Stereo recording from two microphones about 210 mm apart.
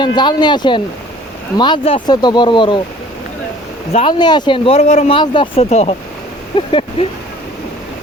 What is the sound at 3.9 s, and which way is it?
Speech, 25° left (ahead or behind).